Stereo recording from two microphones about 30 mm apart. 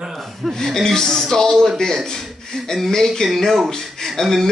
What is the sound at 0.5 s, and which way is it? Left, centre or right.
Speech, centre.